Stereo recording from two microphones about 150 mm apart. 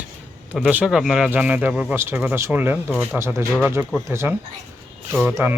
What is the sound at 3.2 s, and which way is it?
Speech, 15° right (ahead or behind).